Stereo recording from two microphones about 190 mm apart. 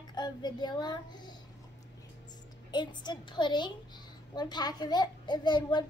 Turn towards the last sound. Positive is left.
turn(degrees=25)  # may be behind; listen again after turning